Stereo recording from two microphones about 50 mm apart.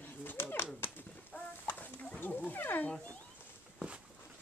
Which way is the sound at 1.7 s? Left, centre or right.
Left.